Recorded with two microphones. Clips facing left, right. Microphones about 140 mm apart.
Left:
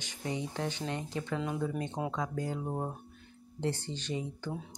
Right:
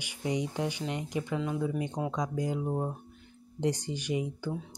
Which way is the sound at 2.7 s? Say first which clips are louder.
Right 4 dB; centre (ahead or behind).